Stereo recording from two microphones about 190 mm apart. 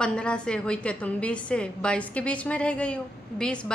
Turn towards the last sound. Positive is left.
turn(degrees=5)  # may be behind; listen again after turning